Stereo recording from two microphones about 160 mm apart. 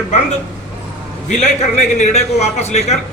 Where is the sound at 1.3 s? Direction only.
45° left (ahead or behind).